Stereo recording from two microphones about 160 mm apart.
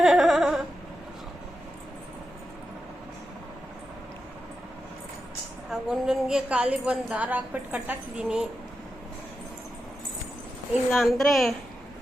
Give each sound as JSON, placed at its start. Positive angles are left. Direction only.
{"t": 0.0, "sound": "a sound", "side_deg": 0}
{"t": 5.7, "sound": "a woman's voice", "side_deg": -5}
{"t": 10.9, "sound": "a woman's voice", "side_deg": 0}